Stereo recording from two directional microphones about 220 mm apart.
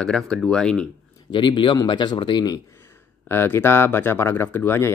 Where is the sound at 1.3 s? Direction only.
20° left (ahead or behind).